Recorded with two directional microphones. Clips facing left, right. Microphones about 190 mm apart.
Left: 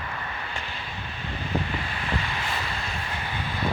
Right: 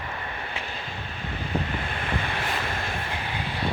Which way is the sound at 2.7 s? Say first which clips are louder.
Right 3 dB; 50° right (ahead or behind).